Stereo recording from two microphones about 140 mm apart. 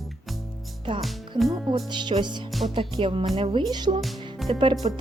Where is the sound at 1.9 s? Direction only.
35° right (ahead or behind).